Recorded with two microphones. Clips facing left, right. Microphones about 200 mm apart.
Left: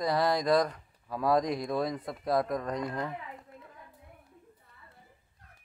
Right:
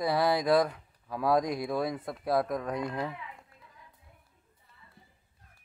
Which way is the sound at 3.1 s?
50° left (ahead or behind).